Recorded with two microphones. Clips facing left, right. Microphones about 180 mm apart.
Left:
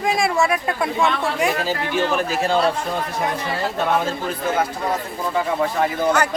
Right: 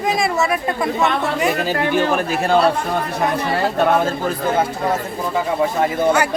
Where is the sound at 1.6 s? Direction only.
55° right (ahead or behind).